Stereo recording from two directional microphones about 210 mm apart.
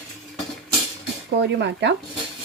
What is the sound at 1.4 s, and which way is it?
Speech, 55° right (ahead or behind).